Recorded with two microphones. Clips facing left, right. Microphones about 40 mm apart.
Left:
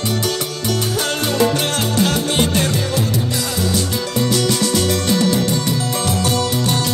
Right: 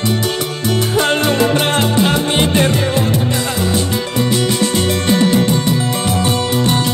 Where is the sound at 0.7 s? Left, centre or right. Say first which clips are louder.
Right 6 dB; right.